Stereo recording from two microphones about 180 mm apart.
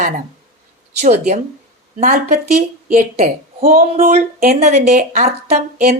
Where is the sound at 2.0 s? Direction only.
50° right (ahead or behind).